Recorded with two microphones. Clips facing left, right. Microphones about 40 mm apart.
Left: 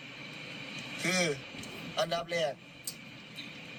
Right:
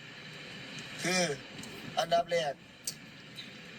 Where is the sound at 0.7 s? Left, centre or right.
Left.